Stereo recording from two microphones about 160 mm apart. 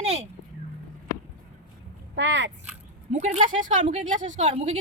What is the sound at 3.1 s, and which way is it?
Speech, 45° right (ahead or behind).